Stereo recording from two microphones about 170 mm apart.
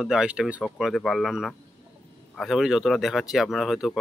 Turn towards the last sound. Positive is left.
turn(degrees=0)  # may be behind; listen again after turning